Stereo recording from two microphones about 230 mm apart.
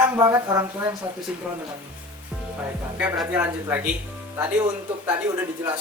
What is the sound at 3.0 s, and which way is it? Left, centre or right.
Speech, centre.